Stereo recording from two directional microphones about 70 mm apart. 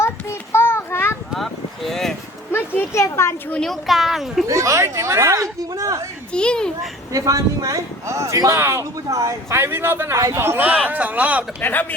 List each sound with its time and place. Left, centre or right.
0.0 s child singing: left
1.3 s a sound: centre
2.5 s speech: left
3.6 s speech: centre
4.4 s speech: right
6.3 s speech: centre
7.1 s speech: right
9.6 s speech: right
10.2 s speech: right
10.8 s speech: right
11.6 s speech: left